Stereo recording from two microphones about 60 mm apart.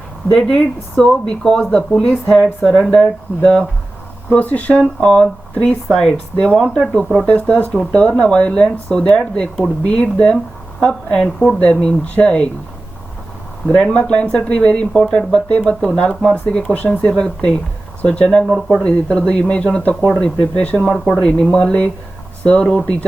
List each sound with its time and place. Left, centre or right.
0.3 s speech: centre
3.0 s speech: centre
4.9 s speech: centre
7.3 s speech: centre
13.7 s speech: centre
17.1 s speech: centre
18.4 s speech: centre
18.8 s speech: centre
20.7 s speech: centre
21.2 s speech: centre